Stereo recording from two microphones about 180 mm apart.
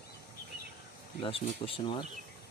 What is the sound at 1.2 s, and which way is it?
Speech, 30° left (ahead or behind).